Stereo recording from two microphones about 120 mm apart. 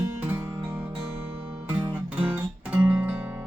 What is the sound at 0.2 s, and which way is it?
Music, 15° right (ahead or behind).